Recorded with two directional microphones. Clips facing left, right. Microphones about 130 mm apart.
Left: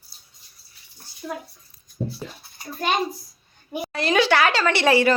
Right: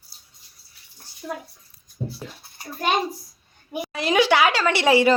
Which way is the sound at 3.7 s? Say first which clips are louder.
Even; 15° right (ahead or behind).